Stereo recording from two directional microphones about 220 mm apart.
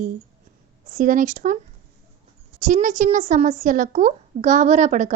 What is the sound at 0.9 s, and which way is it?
Speech, 35° right (ahead or behind).